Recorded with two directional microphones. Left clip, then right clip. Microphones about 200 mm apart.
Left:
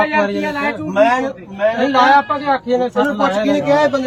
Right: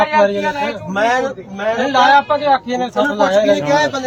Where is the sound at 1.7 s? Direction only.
15° left (ahead or behind).